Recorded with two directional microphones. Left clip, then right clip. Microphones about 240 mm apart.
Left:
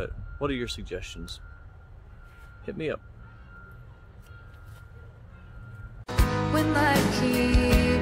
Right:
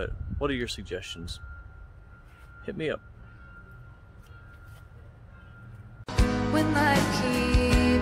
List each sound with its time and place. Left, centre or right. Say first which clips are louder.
0.0 s speech: right 1 dB; centre
2.6 s speech: even; centre
6.0 s music: even; centre